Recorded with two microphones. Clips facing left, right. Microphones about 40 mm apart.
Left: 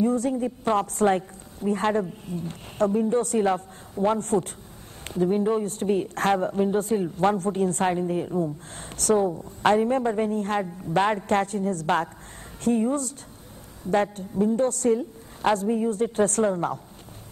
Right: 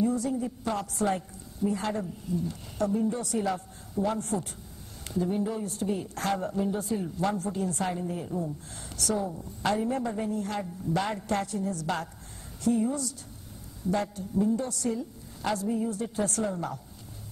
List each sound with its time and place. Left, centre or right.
0.0 s a woman's voice: left
8.0 s a woman's voice: left